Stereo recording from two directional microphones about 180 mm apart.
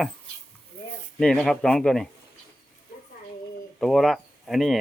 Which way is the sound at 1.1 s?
5° left (ahead or behind).